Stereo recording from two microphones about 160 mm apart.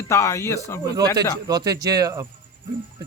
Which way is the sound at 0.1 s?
15° left (ahead or behind).